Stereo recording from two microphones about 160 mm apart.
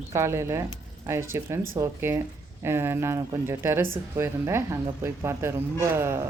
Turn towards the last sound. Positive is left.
turn(degrees=-15)  # may be behind; listen again after turning